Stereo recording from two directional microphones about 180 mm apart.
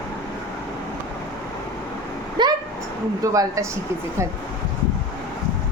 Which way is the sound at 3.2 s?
20° right (ahead or behind).